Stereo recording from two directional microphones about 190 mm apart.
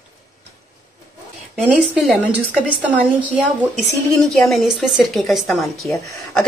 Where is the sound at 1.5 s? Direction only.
5° right (ahead or behind).